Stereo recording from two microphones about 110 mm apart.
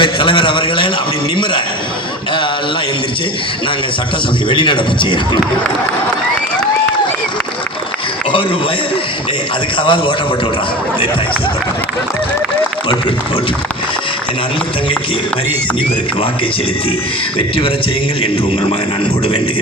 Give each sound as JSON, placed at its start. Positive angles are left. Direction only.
{"t": 0.0, "sound": "a man's voice", "side_deg": 50}
{"t": 4.4, "sound": "a man's voice", "side_deg": 50}
{"t": 9.7, "sound": "a man's voice", "side_deg": 50}